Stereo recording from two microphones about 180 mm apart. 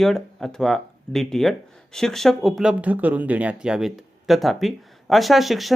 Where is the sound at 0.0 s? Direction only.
Centre (ahead or behind).